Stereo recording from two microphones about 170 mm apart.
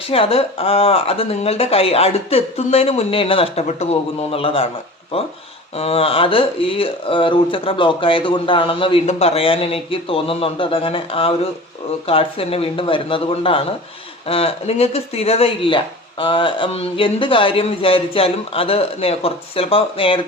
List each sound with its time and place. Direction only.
0.0 s speech: 35° left (ahead or behind)